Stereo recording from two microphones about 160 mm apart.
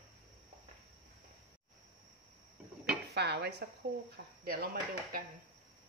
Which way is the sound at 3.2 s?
90° right.